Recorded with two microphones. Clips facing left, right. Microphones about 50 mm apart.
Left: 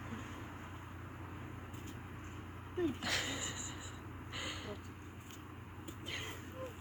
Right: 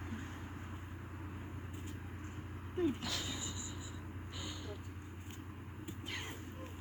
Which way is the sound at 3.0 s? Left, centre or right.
Left.